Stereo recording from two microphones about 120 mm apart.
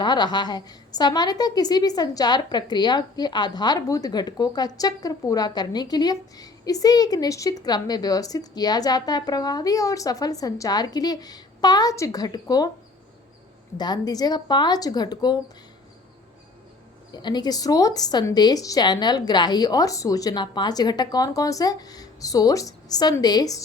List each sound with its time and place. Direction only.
0.0 s a woman's voice: 35° left (ahead or behind)
13.7 s a woman's voice: 35° left (ahead or behind)
17.2 s a woman's voice: 35° left (ahead or behind)